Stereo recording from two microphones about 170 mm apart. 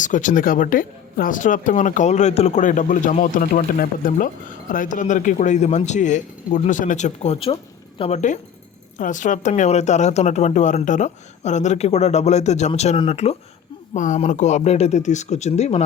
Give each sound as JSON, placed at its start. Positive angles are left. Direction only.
{"t": 0.0, "sound": "a woman's voice", "side_deg": 50}